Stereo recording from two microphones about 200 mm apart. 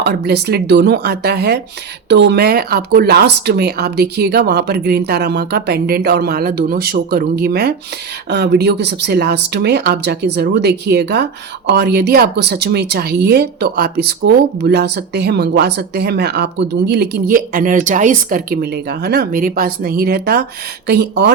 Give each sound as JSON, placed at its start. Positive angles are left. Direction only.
{"t": 0.0, "sound": "speech", "side_deg": -55}